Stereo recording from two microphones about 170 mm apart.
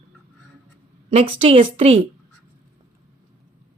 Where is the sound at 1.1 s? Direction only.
35° right (ahead or behind).